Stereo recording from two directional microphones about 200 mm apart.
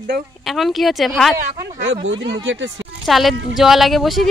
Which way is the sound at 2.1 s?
65° right (ahead or behind).